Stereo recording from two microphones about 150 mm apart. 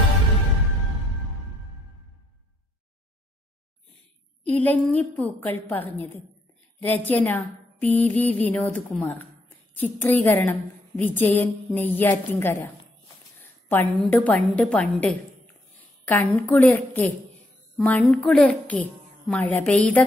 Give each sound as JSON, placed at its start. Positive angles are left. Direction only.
{"t": 4.5, "sound": "a woman's voice", "side_deg": 10}